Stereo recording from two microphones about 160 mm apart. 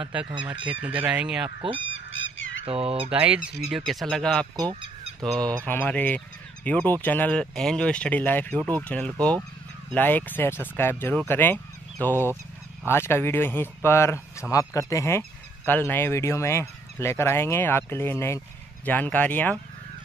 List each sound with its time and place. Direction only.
0.0 s speech: 5° right (ahead or behind)
2.6 s speech: 35° right (ahead or behind)
3.1 s speech: 5° right (ahead or behind)
4.6 s a sound: 30° right (ahead or behind)
5.2 s speech: 5° left (ahead or behind)